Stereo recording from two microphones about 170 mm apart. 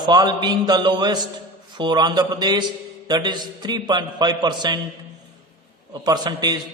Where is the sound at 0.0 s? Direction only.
25° right (ahead or behind).